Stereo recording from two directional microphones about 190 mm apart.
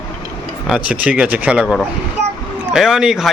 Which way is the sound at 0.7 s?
5° right (ahead or behind).